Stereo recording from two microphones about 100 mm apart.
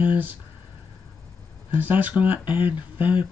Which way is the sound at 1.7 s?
15° right (ahead or behind).